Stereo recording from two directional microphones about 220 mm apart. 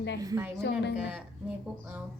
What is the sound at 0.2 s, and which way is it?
A woman's voice, 15° right (ahead or behind).